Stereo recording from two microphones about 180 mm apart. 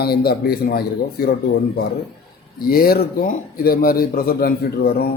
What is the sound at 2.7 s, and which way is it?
A man's voice, 55° left (ahead or behind).